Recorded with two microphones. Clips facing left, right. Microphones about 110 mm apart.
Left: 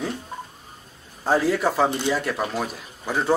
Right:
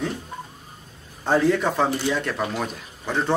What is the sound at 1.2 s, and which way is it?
Speech, 5° left (ahead or behind).